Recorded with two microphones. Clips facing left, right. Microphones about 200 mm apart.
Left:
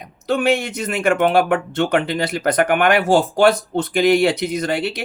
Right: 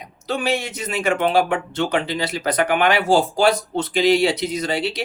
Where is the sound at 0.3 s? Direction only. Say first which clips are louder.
Left 5 dB; 55° left (ahead or behind).